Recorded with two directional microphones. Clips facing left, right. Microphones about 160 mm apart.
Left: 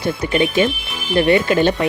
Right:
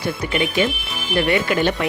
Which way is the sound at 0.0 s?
25° left (ahead or behind).